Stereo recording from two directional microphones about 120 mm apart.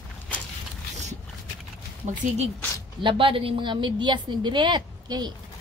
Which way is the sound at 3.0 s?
45° right (ahead or behind).